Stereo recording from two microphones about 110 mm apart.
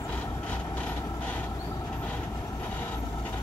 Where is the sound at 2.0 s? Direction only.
15° left (ahead or behind).